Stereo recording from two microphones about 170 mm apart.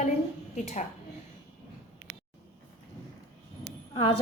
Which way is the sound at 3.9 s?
30° left (ahead or behind).